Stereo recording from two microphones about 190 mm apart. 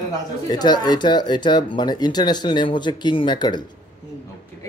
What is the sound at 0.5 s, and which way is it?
Speech, 20° left (ahead or behind).